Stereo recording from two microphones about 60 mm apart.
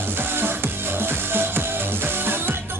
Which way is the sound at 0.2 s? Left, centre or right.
Right.